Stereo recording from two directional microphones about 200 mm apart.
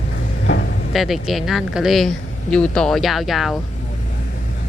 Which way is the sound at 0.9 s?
Centre (ahead or behind).